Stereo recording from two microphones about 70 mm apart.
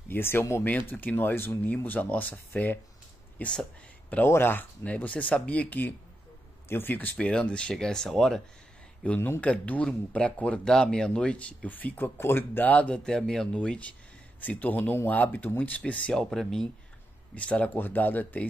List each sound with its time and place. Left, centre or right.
0.1 s speech: left
0.7 s speech: left
4.3 s speech: left
4.8 s speech: left
9.0 s speech: centre
13.0 s speech: centre
16.1 s speech: centre
17.4 s speech: centre